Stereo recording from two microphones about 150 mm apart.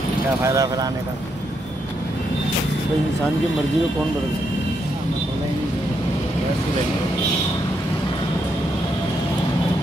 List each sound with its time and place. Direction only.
0.4 s speech: 20° right (ahead or behind)